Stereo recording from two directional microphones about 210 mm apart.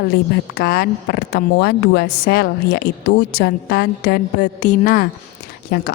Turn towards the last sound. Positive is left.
turn(degrees=45)  # may be behind; listen again after turning